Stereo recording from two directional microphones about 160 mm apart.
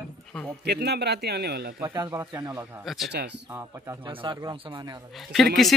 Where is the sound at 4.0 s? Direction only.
30° right (ahead or behind).